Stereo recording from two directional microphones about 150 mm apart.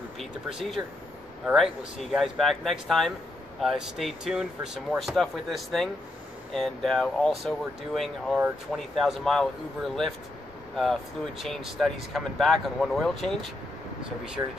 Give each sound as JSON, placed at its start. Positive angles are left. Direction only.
{"t": 0.2, "sound": "speech", "side_deg": 0}
{"t": 14.4, "sound": "speech", "side_deg": -20}